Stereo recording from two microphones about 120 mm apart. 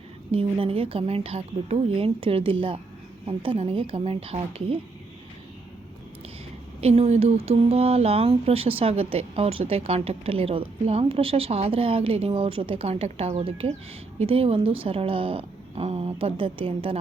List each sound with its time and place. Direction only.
0.3 s speech: 50° right (ahead or behind)
6.8 s speech: 60° right (ahead or behind)